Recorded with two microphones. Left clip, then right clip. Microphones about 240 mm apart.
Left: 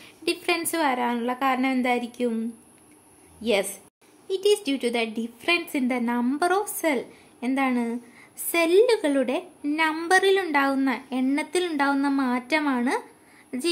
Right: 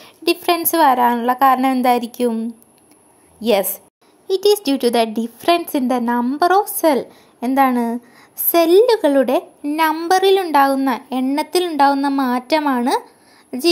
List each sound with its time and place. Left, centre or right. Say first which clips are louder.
0.0 s a woman's voice: right 9 dB; right